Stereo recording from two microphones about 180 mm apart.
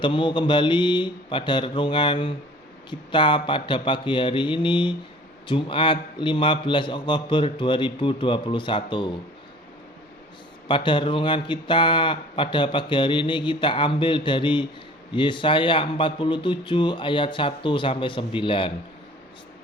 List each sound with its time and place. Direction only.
0.0 s speech: 25° left (ahead or behind)
10.7 s speech: 25° left (ahead or behind)